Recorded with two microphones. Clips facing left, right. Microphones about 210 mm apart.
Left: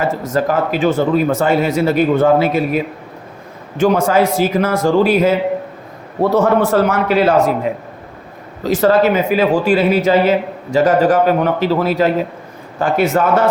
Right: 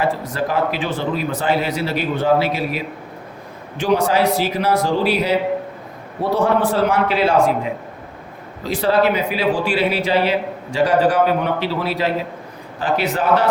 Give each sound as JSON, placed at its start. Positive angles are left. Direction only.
{"t": 0.3, "sound": "speech", "side_deg": 45}
{"t": 6.3, "sound": "speech", "side_deg": 45}
{"t": 8.6, "sound": "speech", "side_deg": 45}